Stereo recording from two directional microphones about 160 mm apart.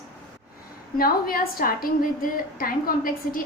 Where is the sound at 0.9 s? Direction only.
70° left (ahead or behind).